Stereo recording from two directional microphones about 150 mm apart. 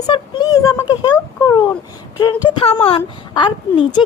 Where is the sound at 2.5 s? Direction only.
40° left (ahead or behind).